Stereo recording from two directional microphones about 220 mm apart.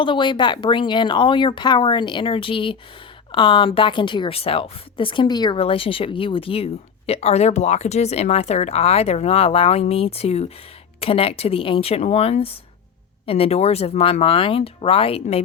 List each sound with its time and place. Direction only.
0.0 s speech: 20° left (ahead or behind)